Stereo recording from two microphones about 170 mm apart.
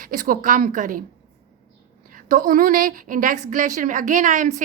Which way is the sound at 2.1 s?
50° right (ahead or behind).